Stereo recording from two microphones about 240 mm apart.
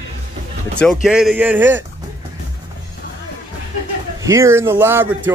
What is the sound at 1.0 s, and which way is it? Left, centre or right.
Speech, centre.